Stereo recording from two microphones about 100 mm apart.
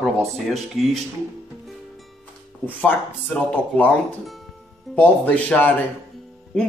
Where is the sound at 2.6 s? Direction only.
20° left (ahead or behind).